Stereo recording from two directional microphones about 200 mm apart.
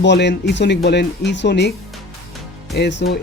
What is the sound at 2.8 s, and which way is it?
Speech, 60° left (ahead or behind).